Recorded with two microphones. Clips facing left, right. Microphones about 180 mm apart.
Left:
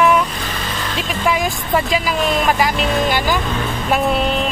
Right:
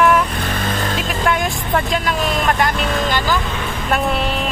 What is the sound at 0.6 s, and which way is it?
Vehicle, 50° right (ahead or behind).